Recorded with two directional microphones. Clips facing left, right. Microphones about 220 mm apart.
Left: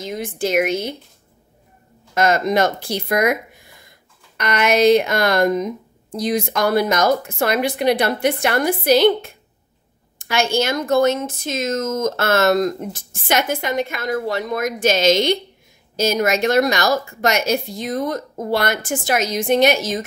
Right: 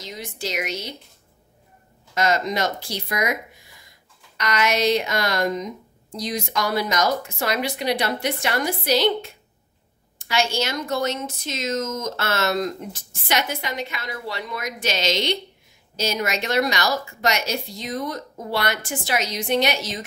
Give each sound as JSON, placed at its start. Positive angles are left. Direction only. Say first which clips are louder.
{"t": 0.0, "sound": "a woman's voice", "louder": "left 9 dB", "side_deg": 50}
{"t": 2.1, "sound": "a woman's voice", "louder": "left 6 dB", "side_deg": 55}
{"t": 4.4, "sound": "a woman's voice", "louder": "left 6 dB", "side_deg": 55}